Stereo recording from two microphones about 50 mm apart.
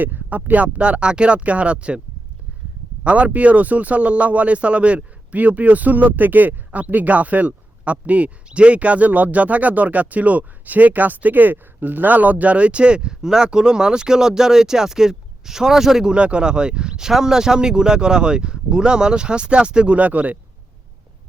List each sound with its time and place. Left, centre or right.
0.0 s a man's voice: right
3.0 s a man's voice: right; by 16.1 s centre
16.1 s a man's voice: right